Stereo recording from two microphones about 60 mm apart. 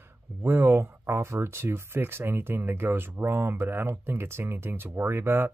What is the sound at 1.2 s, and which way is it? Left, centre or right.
Speech, right.